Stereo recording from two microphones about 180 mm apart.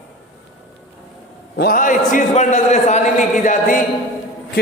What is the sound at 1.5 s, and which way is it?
A man's voice, 55° left (ahead or behind).